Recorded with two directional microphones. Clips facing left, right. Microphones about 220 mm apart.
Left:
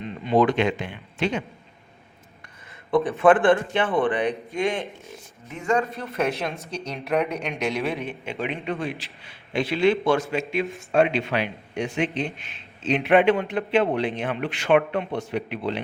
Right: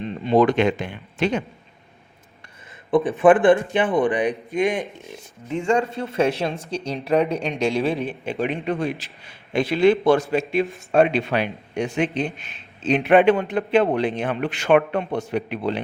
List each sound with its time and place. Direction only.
0.0 s speech: 35° right (ahead or behind)
2.9 s a man's voice: 15° right (ahead or behind)
5.5 s a man's voice: 30° right (ahead or behind)